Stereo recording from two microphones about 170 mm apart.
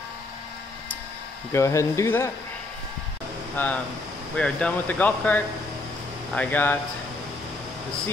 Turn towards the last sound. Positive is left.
turn(degrees=10)  # may be behind; listen again after turning